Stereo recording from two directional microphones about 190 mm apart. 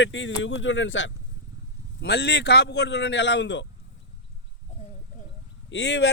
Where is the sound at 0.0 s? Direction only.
75° left (ahead or behind).